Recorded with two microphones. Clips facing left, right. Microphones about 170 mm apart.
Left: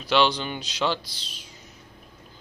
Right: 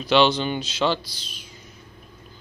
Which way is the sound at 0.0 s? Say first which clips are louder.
Right 4 dB; 10° left (ahead or behind).